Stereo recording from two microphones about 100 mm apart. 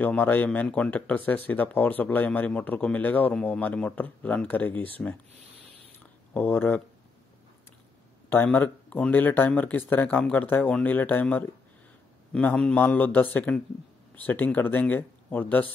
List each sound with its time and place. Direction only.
0.0 s speech: 20° left (ahead or behind)
6.3 s speech: 20° left (ahead or behind)
8.3 s speech: 15° left (ahead or behind)